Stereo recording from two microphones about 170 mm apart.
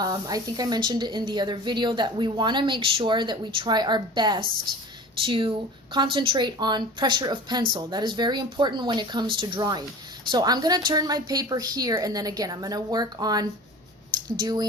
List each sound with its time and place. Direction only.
0.0 s speech: 20° right (ahead or behind)